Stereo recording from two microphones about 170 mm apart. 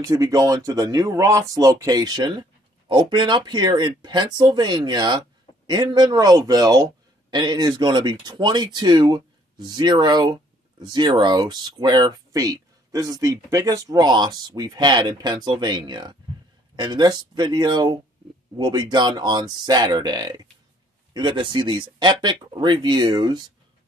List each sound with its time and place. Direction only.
0.0 s speech: 20° right (ahead or behind)